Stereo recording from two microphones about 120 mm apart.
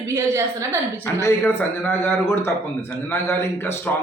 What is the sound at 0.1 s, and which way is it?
Speech, 25° right (ahead or behind).